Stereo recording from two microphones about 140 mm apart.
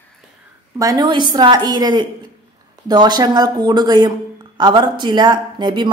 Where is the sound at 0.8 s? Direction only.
30° right (ahead or behind).